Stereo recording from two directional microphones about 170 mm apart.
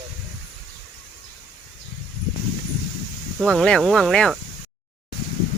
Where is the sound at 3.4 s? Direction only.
Centre (ahead or behind).